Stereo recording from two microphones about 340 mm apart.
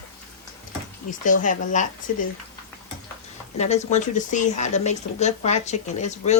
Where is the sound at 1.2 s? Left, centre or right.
Left.